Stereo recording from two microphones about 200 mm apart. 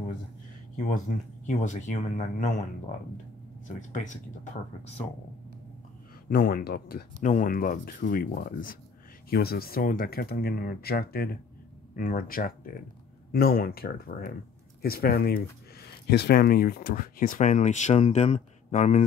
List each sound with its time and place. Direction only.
0.7 s speech: 40° left (ahead or behind)
3.6 s speech: 40° left (ahead or behind)
6.2 s speech: 45° left (ahead or behind)